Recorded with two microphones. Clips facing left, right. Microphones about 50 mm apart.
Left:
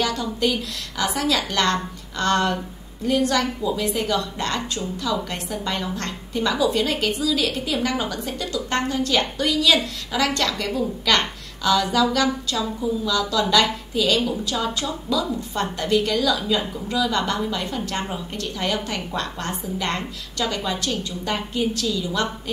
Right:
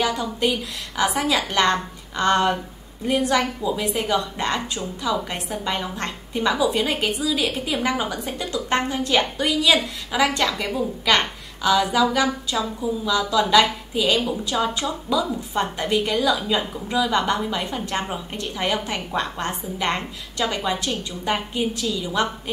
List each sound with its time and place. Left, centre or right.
0.0 s a woman's voice: centre